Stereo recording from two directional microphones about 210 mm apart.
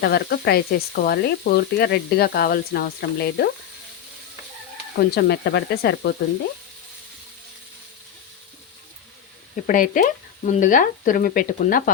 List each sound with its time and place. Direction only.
0.0 s speech: 50° left (ahead or behind)
4.9 s speech: 50° left (ahead or behind)
9.6 s speech: 40° left (ahead or behind)